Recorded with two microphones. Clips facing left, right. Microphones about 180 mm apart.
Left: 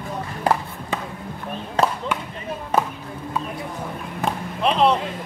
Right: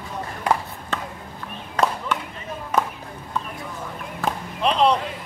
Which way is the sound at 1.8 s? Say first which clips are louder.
Left 1 dB; 25° left (ahead or behind).